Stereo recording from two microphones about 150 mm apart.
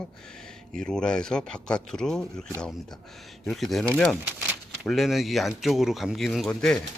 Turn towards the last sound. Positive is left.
turn(degrees=0)  # may be behind; listen again after turning